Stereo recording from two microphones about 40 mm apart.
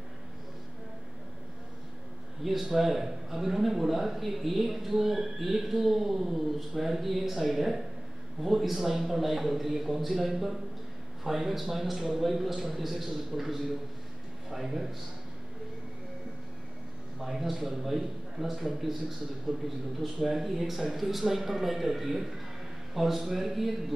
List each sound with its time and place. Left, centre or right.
2.6 s a man's voice: centre
17.2 s a man's voice: centre
19.5 s a man's voice: right
20.2 s a man's voice: centre